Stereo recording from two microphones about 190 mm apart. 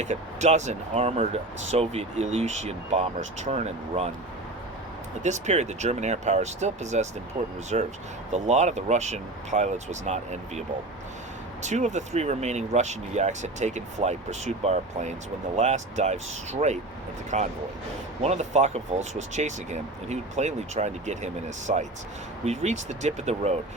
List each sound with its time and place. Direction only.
0.0 s speech: 35° right (ahead or behind)
5.2 s speech: 40° right (ahead or behind)
11.6 s speech: 40° right (ahead or behind)